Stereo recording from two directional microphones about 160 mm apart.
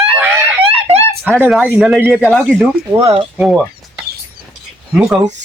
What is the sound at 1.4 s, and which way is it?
A man's voice, 10° right (ahead or behind).